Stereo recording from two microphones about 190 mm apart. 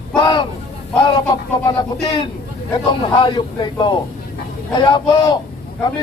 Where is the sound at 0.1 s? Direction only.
25° left (ahead or behind).